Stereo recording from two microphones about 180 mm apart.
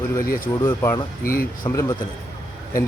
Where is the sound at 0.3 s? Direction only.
50° left (ahead or behind).